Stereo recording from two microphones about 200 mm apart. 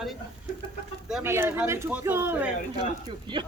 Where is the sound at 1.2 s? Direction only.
10° right (ahead or behind).